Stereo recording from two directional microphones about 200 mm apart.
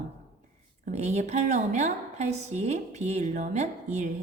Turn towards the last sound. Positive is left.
turn(degrees=-35)  # may be behind; listen again after turning